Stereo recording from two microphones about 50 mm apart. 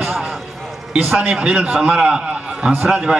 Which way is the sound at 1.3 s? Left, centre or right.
Right.